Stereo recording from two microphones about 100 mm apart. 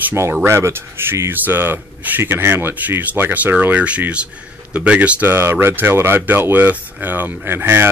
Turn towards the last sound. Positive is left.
turn(degrees=-20)  # may be behind; listen again after turning